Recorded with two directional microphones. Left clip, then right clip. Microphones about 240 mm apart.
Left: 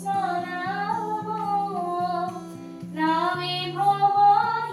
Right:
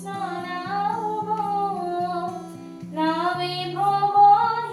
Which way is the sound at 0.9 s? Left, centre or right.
Centre.